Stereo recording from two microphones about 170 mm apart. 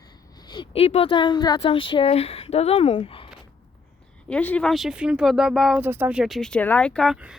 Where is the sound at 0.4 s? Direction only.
25° left (ahead or behind).